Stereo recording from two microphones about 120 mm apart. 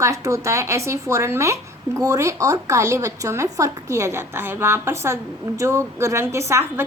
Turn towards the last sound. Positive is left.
turn(degrees=-20)  # may be behind; listen again after turning